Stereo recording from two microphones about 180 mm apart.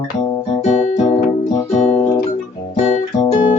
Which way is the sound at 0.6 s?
40° left (ahead or behind).